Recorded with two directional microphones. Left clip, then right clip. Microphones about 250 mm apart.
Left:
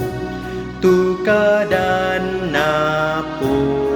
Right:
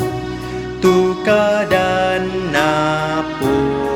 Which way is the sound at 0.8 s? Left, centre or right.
Right.